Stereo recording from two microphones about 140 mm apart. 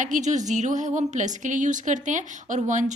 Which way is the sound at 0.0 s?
60° right (ahead or behind).